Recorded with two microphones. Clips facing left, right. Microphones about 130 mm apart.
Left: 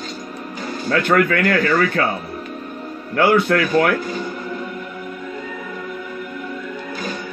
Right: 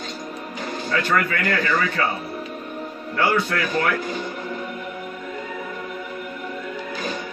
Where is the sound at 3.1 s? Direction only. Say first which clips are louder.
Left 6 dB; 55° left (ahead or behind).